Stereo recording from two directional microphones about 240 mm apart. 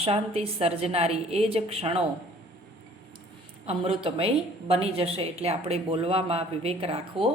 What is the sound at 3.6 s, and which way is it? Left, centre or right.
A woman's voice, right.